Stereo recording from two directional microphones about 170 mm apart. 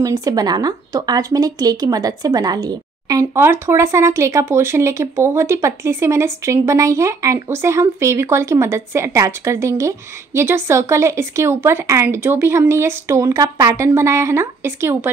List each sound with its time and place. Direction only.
0.0 s speech: 20° right (ahead or behind)